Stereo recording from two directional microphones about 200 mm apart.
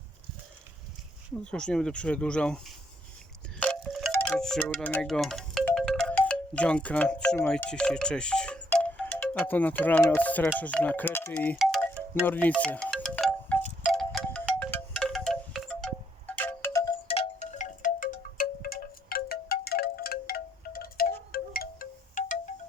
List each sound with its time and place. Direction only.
1.5 s speech: 5° left (ahead or behind)
3.6 s wind chime: 5° left (ahead or behind)
4.1 s speech: 5° left (ahead or behind)
11.5 s wind chime: centre (ahead or behind)
12.2 s wind chime: 10° left (ahead or behind); by 22.4 s 45° left (ahead or behind)